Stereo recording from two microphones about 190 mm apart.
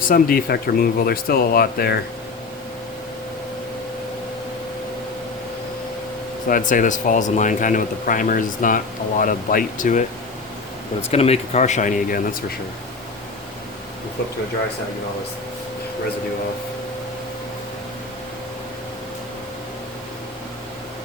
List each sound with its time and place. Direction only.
0.0 s speech: 50° left (ahead or behind)
6.5 s speech: 45° left (ahead or behind)
11.1 s speech: 35° left (ahead or behind); by 12.5 s 50° left (ahead or behind)